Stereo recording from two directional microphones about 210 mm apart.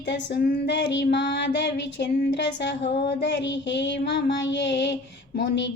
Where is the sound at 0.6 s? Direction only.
55° left (ahead or behind).